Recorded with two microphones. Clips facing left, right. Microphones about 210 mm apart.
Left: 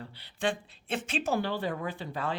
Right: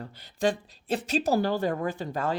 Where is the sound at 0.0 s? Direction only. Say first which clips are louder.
Right 5 dB; 40° right (ahead or behind).